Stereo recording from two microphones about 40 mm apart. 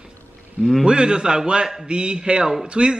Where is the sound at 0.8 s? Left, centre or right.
Right.